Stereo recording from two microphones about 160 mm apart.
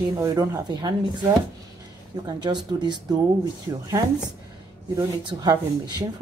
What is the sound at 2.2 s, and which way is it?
Speech, 25° right (ahead or behind).